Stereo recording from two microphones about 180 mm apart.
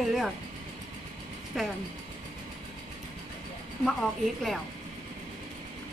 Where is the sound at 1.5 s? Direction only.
Centre (ahead or behind).